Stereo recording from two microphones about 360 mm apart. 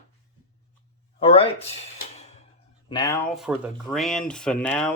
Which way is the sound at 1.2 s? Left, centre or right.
Centre.